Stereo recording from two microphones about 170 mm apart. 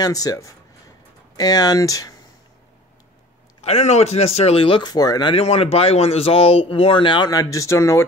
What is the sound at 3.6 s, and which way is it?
Speech, 40° left (ahead or behind).